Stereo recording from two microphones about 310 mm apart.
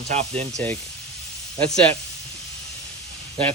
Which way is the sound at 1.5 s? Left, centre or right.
Centre.